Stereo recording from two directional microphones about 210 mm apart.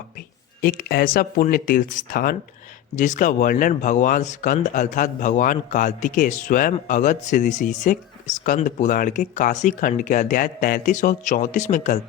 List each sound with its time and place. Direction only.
0.6 s speech: 45° left (ahead or behind)